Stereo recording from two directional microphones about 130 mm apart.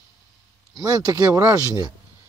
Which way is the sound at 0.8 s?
30° right (ahead or behind).